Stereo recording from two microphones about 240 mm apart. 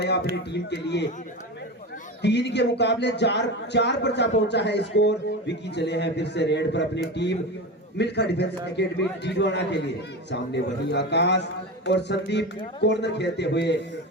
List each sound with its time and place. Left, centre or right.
0.5 s a man's voice: left
2.2 s a man's voice: left